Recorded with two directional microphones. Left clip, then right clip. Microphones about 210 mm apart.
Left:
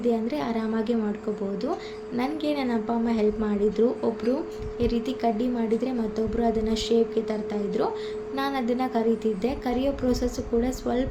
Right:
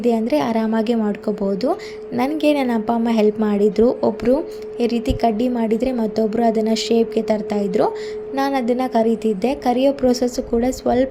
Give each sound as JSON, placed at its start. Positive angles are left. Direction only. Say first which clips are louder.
{"t": 0.0, "sound": "speech", "louder": "right 8 dB", "side_deg": -35}
{"t": 2.1, "sound": "speech", "louder": "right 10 dB", "side_deg": -35}